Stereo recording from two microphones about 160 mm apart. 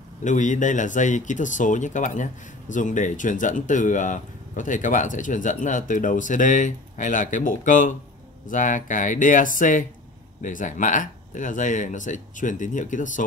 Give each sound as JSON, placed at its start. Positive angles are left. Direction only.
{"t": 0.2, "sound": "speech", "side_deg": 50}